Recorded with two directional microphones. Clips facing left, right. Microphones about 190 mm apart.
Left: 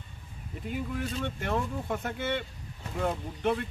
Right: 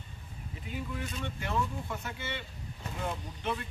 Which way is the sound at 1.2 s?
55° left (ahead or behind).